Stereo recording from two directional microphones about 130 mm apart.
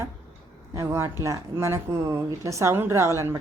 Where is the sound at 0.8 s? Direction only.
20° right (ahead or behind).